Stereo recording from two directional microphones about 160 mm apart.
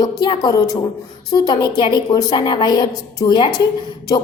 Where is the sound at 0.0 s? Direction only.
25° left (ahead or behind).